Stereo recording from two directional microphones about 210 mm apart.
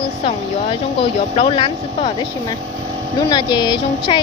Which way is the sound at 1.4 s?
25° left (ahead or behind).